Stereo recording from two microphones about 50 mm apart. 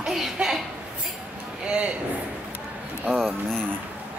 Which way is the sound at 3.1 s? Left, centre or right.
Centre.